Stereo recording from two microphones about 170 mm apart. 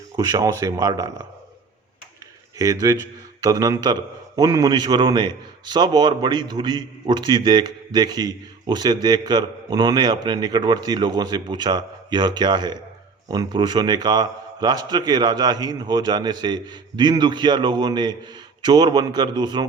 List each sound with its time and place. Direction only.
0.2 s a man's voice: 20° right (ahead or behind)
2.6 s a man's voice: 20° right (ahead or behind)